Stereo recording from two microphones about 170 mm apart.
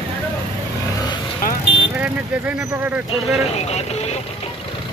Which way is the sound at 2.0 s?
10° right (ahead or behind).